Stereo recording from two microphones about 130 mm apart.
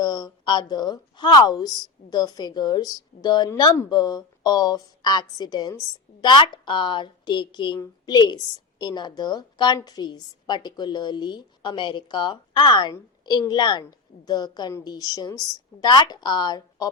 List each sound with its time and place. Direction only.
0.0 s a woman's voice: 30° left (ahead or behind)